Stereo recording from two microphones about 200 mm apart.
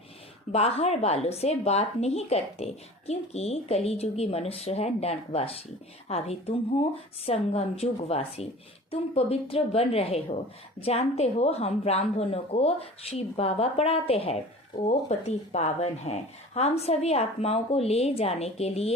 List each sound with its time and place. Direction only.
0.5 s speech: 30° left (ahead or behind)